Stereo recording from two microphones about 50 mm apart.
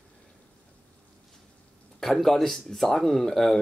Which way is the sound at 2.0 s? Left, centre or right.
Centre.